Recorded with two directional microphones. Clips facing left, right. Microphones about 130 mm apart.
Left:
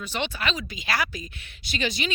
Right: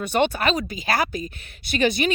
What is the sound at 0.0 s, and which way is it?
A woman's voice, 55° right (ahead or behind).